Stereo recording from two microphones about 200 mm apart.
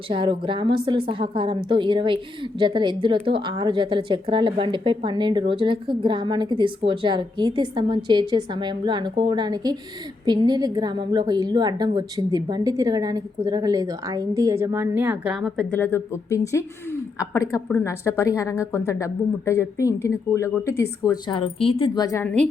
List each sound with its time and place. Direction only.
0.1 s a woman's voice: 25° right (ahead or behind); by 22.4 s 10° left (ahead or behind)